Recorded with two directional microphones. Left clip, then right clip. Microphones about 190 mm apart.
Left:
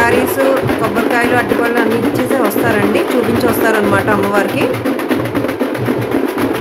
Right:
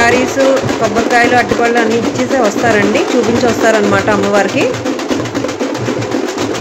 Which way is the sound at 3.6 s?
15° right (ahead or behind).